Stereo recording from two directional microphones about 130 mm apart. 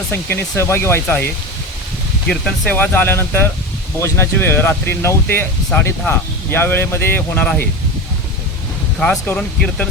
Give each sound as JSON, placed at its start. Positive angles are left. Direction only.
{"t": 0.1, "sound": "speech", "side_deg": 20}
{"t": 2.2, "sound": "speech", "side_deg": 5}
{"t": 9.0, "sound": "speech", "side_deg": 10}